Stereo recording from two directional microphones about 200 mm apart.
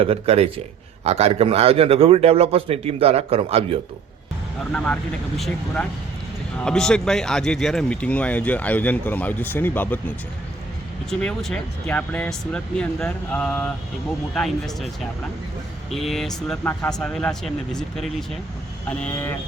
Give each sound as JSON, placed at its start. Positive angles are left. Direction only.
{"t": 0.0, "sound": "a man's voice", "side_deg": -30}
{"t": 4.7, "sound": "speech", "side_deg": 5}
{"t": 6.6, "sound": "speech", "side_deg": 5}
{"t": 11.1, "sound": "speech", "side_deg": 5}
{"t": 15.9, "sound": "speech", "side_deg": 0}